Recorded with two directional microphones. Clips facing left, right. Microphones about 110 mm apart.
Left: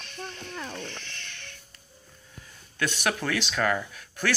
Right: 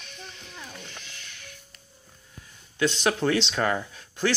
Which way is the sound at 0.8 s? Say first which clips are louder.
Left 4 dB; 10° right (ahead or behind).